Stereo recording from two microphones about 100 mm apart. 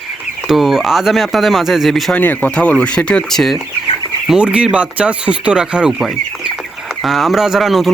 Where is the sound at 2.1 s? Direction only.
15° left (ahead or behind).